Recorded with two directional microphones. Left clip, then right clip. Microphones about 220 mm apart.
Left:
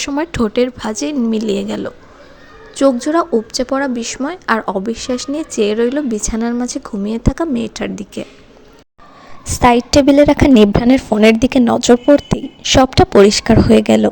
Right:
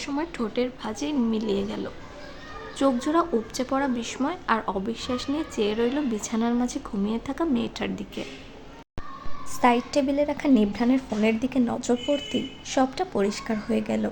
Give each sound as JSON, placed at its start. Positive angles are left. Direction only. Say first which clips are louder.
{"t": 0.0, "sound": "a woman's voice", "louder": "left 12 dB", "side_deg": 35}
{"t": 9.5, "sound": "a woman's voice", "louder": "left 11 dB", "side_deg": 40}